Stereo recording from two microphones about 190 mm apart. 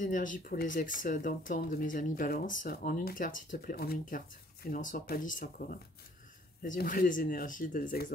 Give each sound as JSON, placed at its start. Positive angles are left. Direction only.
{"t": 0.0, "sound": "speech", "side_deg": 45}